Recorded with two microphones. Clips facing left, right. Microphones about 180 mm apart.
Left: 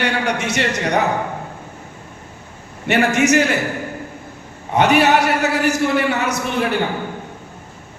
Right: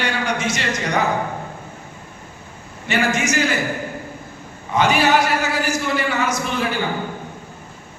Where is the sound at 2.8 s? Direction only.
65° left (ahead or behind).